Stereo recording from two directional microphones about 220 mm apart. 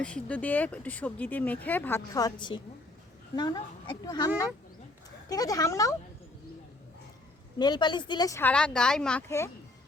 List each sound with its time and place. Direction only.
0.0 s speech: 5° left (ahead or behind)
5.3 s speech: 15° left (ahead or behind)
7.6 s speech: 20° left (ahead or behind)